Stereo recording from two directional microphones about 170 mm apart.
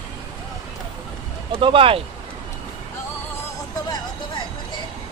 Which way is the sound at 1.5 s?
30° right (ahead or behind).